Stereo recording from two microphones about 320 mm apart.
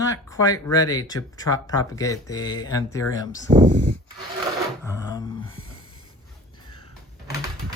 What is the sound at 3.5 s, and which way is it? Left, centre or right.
Speech, right.